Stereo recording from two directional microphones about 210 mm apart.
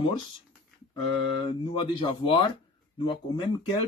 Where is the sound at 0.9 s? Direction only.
20° left (ahead or behind).